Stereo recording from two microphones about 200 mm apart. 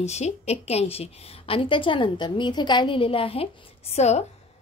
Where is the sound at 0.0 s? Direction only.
35° left (ahead or behind).